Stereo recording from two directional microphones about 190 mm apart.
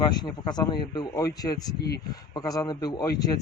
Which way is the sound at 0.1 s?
20° left (ahead or behind).